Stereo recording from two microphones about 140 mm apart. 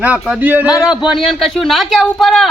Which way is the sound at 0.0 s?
10° right (ahead or behind).